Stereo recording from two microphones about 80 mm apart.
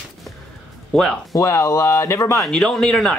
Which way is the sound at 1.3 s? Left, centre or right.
Left.